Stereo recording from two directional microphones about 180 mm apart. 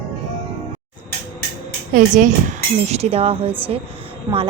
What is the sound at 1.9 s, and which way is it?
Speech, 45° right (ahead or behind).